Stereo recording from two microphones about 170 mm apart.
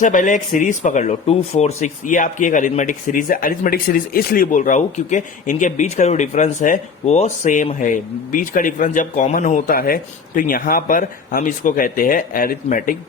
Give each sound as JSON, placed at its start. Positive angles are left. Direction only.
{"t": 0.0, "sound": "speech", "side_deg": 50}